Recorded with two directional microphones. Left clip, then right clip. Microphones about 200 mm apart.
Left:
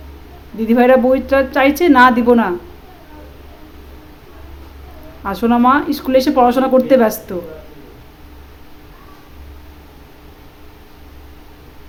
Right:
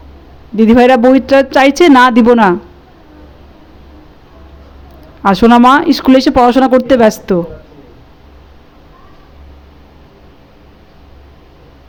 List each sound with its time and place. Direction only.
0.6 s speech: 40° right (ahead or behind)
5.2 s speech: 40° right (ahead or behind)